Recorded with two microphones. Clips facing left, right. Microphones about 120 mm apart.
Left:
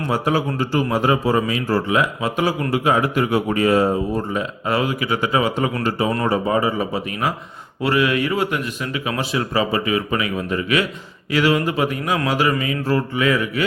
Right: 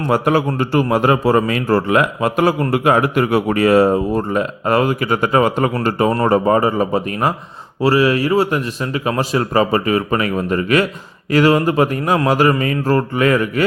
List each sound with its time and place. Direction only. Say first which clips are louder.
0.1 s speech: right 5 dB; 60° right (ahead or behind); by 7.3 s 45° right (ahead or behind)
7.8 s speech: right 5 dB; 35° right (ahead or behind)